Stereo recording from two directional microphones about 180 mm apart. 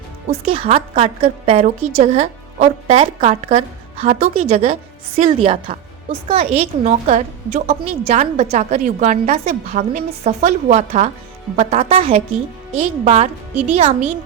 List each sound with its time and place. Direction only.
0.4 s a woman's voice: 35° right (ahead or behind)